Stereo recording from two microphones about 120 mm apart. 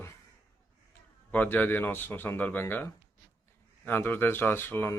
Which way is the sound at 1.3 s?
15° left (ahead or behind).